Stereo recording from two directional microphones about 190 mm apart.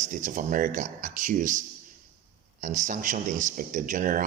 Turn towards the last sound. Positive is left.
turn(degrees=-45)  # may be behind; listen again after turning